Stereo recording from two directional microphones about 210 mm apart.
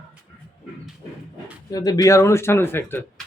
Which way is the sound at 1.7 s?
20° left (ahead or behind).